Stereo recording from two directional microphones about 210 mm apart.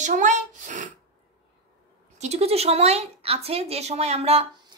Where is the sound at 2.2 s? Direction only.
30° right (ahead or behind).